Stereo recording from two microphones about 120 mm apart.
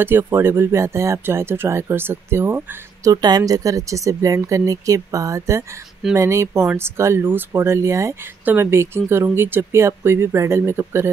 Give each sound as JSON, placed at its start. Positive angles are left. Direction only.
{"t": 0.0, "sound": "speech", "side_deg": -20}
{"t": 3.1, "sound": "speech", "side_deg": -35}